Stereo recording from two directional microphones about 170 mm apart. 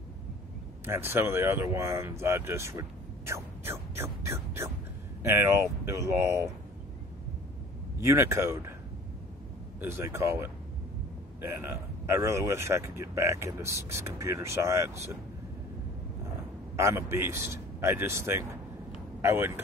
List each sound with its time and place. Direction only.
0.8 s speech: 15° right (ahead or behind)
8.0 s speech: 15° right (ahead or behind)
9.8 s speech: 15° right (ahead or behind)
11.6 s speech: 15° right (ahead or behind)
16.7 s speech: 15° right (ahead or behind)